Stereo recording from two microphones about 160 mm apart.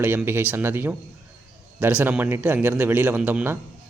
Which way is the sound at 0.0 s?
15° right (ahead or behind).